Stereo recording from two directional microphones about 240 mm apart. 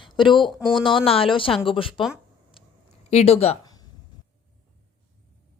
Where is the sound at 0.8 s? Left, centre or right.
Left.